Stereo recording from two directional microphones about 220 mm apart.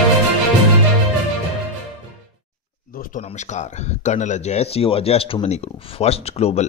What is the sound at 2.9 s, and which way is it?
Speech, 40° left (ahead or behind).